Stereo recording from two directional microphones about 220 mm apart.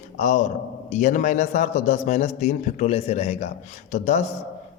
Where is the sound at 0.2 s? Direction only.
35° left (ahead or behind).